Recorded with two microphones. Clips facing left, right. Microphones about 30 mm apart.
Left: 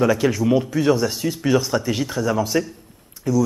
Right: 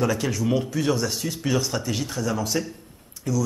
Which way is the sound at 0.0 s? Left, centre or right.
Centre.